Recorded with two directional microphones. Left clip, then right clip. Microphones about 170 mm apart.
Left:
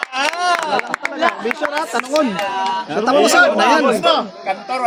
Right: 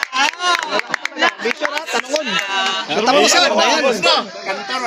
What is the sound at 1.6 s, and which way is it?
Speech, 70° left (ahead or behind).